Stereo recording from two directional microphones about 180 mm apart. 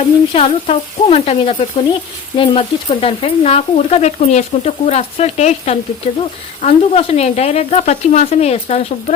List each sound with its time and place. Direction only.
0.3 s speech: 35° left (ahead or behind)